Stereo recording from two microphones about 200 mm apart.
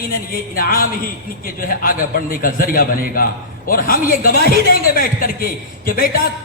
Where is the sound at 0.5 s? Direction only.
45° left (ahead or behind).